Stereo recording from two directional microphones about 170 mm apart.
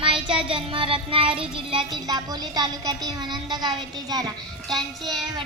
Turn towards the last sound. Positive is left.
turn(degrees=0)  # may be behind; listen again after turning